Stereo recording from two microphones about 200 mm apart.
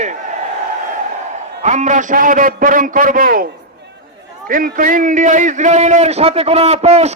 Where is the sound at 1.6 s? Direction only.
35° right (ahead or behind).